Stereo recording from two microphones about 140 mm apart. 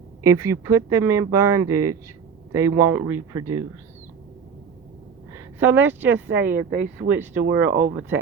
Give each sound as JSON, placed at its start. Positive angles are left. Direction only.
{"t": 0.2, "sound": "speech", "side_deg": -20}
{"t": 5.3, "sound": "speech", "side_deg": -15}
{"t": 6.5, "sound": "speech", "side_deg": -65}
{"t": 7.1, "sound": "speech", "side_deg": -15}
{"t": 7.7, "sound": "speech", "side_deg": -65}